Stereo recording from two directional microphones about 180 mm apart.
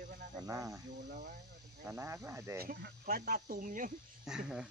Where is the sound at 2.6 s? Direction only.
55° right (ahead or behind).